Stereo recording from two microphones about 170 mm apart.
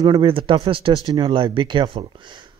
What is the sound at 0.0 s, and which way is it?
Speech, 30° right (ahead or behind).